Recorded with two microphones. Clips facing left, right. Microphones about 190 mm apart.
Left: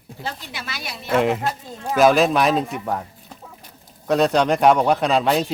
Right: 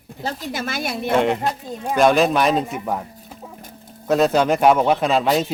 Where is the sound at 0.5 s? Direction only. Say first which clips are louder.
Right 8 dB; 50° right (ahead or behind).